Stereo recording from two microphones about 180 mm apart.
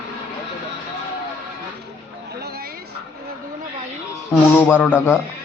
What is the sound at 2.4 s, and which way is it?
Vehicle, 60° right (ahead or behind).